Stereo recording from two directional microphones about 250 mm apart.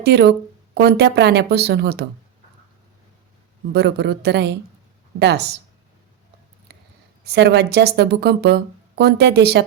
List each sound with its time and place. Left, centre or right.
0.0 s speech: right
3.7 s speech: right
7.3 s speech: right